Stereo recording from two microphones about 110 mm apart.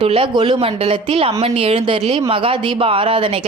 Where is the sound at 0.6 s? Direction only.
60° right (ahead or behind).